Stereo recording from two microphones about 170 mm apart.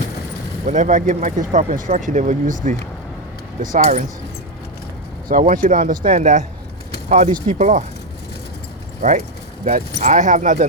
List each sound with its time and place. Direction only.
0.6 s speech: 45° right (ahead or behind)
5.3 s speech: 55° right (ahead or behind)
9.0 s speech: 45° right (ahead or behind)